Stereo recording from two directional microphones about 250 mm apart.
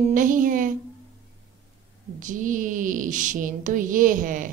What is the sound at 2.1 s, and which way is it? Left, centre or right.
A woman's voice, right.